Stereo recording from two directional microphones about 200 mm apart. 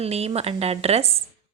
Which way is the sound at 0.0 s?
30° right (ahead or behind).